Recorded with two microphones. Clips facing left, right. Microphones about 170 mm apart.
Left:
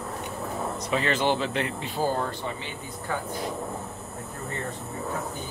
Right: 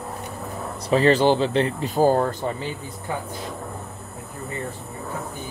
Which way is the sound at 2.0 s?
45° right (ahead or behind).